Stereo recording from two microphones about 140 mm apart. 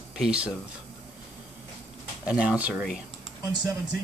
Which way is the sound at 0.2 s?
10° right (ahead or behind).